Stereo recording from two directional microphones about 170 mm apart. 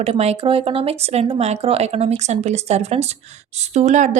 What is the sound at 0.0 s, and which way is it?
A woman's voice, 35° right (ahead or behind).